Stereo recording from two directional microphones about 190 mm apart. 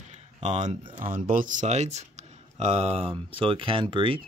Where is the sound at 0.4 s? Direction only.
40° right (ahead or behind).